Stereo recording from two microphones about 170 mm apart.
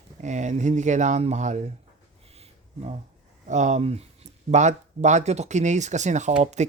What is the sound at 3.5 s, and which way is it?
Speech, 45° right (ahead or behind).